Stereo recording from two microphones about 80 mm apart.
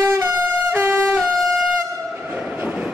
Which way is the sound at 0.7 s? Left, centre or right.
Right.